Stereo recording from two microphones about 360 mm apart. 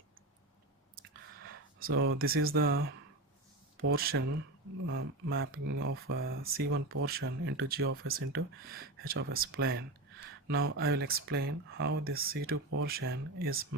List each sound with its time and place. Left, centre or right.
1.5 s speech: right